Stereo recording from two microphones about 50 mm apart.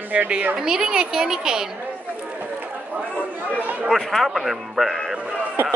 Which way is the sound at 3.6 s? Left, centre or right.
Right.